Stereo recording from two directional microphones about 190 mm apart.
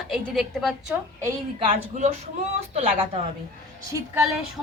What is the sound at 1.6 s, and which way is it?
A woman's voice, 30° right (ahead or behind).